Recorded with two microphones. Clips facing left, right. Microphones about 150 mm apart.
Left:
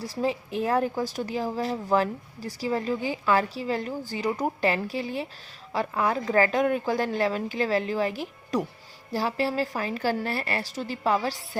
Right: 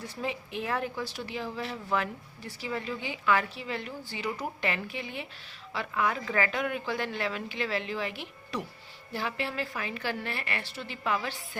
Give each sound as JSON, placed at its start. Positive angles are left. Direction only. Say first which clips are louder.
{"t": 0.0, "sound": "speech", "louder": "left 7 dB", "side_deg": 35}